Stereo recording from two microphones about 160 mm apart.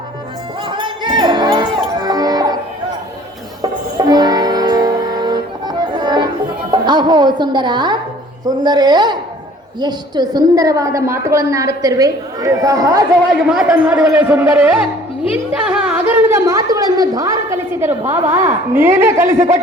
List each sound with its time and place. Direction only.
0.7 s music: 30° right (ahead or behind)
3.6 s music: 25° right (ahead or behind)
8.4 s a woman's voice: 25° right (ahead or behind)
13.5 s a man's voice: 5° right (ahead or behind)
15.6 s a sound: 5° right (ahead or behind)
18.7 s a woman's voice: 15° right (ahead or behind)